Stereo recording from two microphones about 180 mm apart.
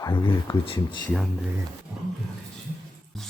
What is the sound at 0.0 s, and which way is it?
Speech, 25° left (ahead or behind).